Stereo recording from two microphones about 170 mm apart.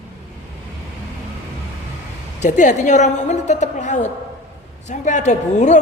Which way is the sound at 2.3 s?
45° left (ahead or behind).